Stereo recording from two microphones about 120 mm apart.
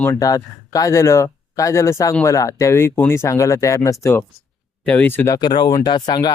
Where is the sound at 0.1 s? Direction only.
30° left (ahead or behind).